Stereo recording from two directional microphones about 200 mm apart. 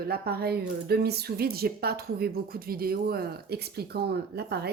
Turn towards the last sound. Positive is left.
turn(degrees=-55)  # may be behind; listen again after turning